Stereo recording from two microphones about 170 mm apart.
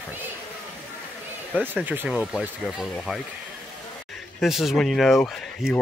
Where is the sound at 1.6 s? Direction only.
10° right (ahead or behind).